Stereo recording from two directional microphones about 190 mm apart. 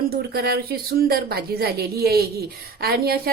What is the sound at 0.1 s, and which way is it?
A woman's voice, 55° right (ahead or behind).